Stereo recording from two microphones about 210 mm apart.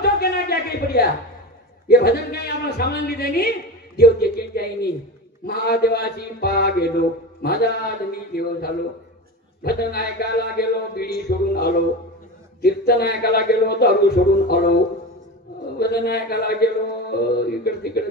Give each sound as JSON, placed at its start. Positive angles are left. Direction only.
{"t": 0.0, "sound": "a sound", "side_deg": 50}
{"t": 1.9, "sound": "a man's voice", "side_deg": 50}
{"t": 15.8, "sound": "a man's voice", "side_deg": 50}